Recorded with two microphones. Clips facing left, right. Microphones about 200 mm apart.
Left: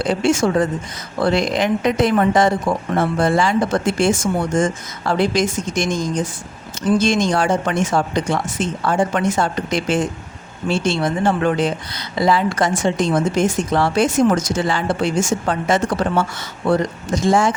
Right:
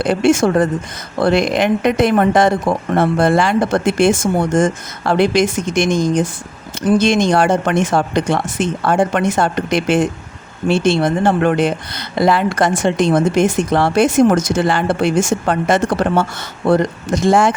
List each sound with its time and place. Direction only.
0.0 s speech: 60° right (ahead or behind)